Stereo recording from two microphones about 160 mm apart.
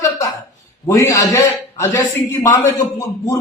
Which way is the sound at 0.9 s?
20° left (ahead or behind).